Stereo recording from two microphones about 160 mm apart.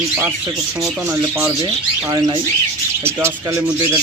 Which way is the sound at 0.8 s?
10° right (ahead or behind).